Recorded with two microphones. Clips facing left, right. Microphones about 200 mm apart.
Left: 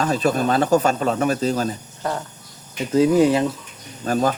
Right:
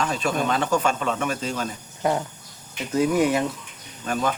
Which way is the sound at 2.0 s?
15° right (ahead or behind).